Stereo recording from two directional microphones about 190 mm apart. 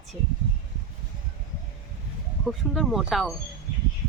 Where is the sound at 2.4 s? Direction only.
Centre (ahead or behind).